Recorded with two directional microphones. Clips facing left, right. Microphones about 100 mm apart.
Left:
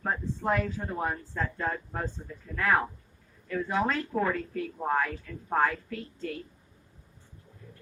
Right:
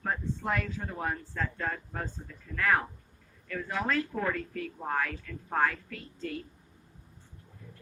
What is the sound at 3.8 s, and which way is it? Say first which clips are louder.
A woman's voice: left 2 dB; 5° left (ahead or behind).